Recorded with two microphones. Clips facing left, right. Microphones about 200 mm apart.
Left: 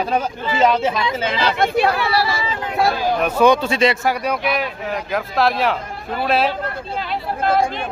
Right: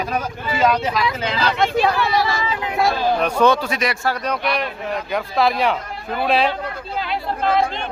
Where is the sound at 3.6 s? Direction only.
25° left (ahead or behind).